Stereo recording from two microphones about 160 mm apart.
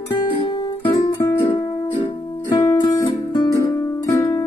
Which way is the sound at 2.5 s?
25° left (ahead or behind).